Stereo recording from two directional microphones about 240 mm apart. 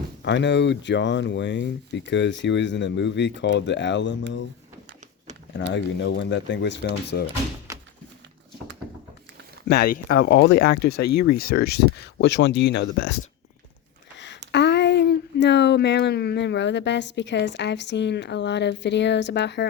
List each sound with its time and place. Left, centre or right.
0.2 s speech: left
5.5 s speech: left
7.7 s a sound: centre
9.6 s speech: left
14.5 s speech: left